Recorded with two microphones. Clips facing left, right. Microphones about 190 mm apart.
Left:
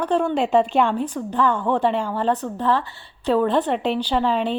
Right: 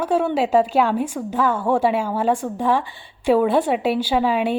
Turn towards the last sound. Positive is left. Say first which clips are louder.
# right 2 dB
turn(degrees=-10)  # may be behind; listen again after turning